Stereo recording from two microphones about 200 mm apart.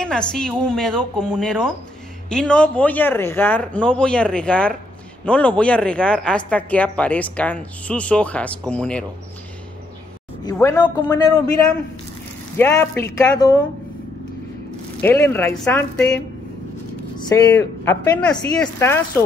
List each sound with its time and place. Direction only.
0.0 s speech: 5° left (ahead or behind)
10.4 s a woman's voice: 15° left (ahead or behind)
12.5 s speech: 10° left (ahead or behind)
15.0 s speech: 10° left (ahead or behind)
17.3 s speech: 10° left (ahead or behind)